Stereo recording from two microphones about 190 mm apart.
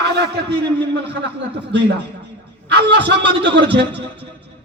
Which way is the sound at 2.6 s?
65° right (ahead or behind).